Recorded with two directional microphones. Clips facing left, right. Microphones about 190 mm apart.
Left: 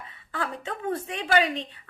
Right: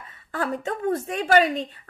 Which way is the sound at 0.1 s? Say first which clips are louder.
Right 6 dB; 40° right (ahead or behind).